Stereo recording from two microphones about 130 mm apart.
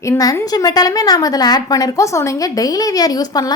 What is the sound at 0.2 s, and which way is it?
A woman's voice, 30° left (ahead or behind).